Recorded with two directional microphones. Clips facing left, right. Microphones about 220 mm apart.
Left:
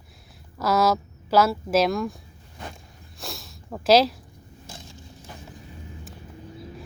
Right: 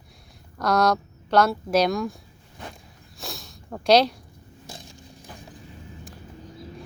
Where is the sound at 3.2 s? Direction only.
Centre (ahead or behind).